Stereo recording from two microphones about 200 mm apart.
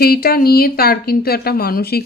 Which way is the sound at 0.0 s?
50° left (ahead or behind).